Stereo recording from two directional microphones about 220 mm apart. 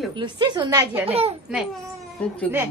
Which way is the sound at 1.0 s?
25° right (ahead or behind).